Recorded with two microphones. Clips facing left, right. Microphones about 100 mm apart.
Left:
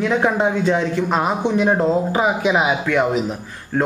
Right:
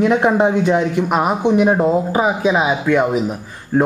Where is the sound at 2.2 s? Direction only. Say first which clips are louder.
Right 2 dB; centre (ahead or behind).